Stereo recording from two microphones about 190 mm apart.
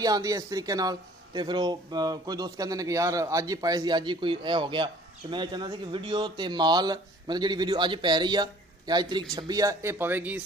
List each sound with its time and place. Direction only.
0.0 s speech: 20° right (ahead or behind)